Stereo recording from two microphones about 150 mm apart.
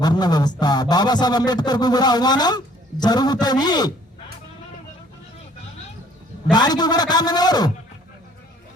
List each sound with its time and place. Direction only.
0.0 s a man's voice: 25° left (ahead or behind)
6.5 s a man's voice: 30° left (ahead or behind)